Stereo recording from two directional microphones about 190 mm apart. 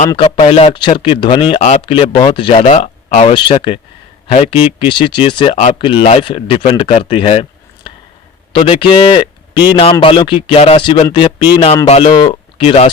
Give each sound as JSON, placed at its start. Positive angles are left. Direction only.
{"t": 0.3, "sound": "a man's voice", "side_deg": 30}
{"t": 7.9, "sound": "a sound", "side_deg": 25}
{"t": 8.5, "sound": "a man's voice", "side_deg": 25}